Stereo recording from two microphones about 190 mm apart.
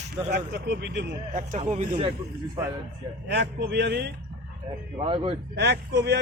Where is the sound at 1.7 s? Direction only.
40° right (ahead or behind).